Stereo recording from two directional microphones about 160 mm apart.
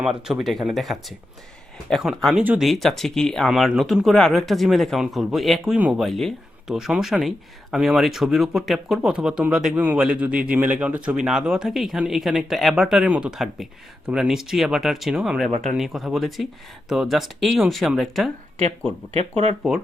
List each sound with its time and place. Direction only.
0.0 s speech: 5° right (ahead or behind)